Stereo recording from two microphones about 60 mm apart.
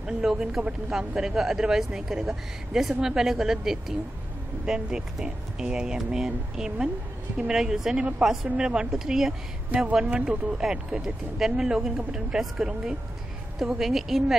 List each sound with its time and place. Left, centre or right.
0.0 s speech: centre
9.7 s speech: right
10.6 s a woman's voice: centre